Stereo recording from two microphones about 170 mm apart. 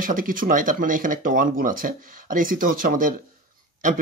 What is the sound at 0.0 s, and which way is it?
Speech, 55° right (ahead or behind).